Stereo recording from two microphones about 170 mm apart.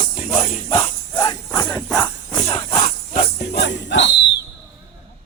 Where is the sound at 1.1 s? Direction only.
20° left (ahead or behind).